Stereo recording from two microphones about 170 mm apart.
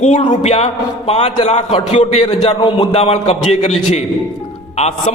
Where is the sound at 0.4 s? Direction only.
40° left (ahead or behind).